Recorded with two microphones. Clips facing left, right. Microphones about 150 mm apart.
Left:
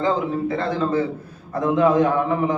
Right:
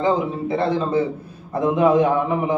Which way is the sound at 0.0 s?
20° right (ahead or behind).